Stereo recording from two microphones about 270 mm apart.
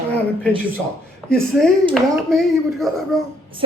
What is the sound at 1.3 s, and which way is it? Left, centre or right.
Speech, centre.